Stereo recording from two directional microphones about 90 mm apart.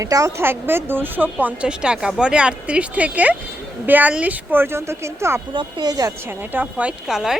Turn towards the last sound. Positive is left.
turn(degrees=-5)  # may be behind; listen again after turning